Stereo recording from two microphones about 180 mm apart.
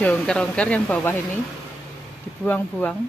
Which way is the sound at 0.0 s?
5° left (ahead or behind).